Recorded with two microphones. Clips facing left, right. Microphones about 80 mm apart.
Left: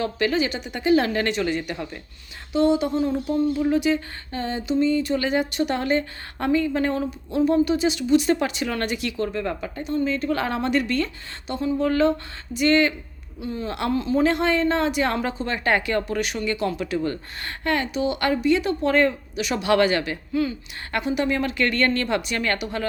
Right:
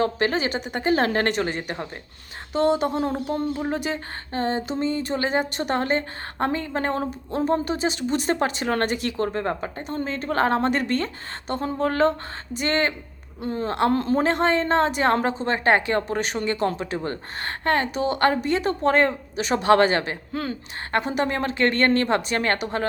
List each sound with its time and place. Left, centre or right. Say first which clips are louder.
0.0 s a woman's voice: even; right